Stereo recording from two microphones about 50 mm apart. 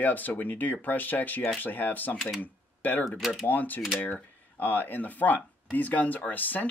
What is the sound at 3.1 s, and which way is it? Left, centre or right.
Speech, centre.